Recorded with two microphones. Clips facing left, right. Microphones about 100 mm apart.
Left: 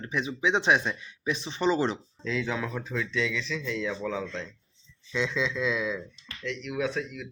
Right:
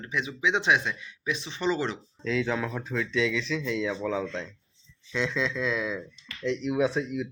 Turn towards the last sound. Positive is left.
turn(degrees=-20)  # may be behind; listen again after turning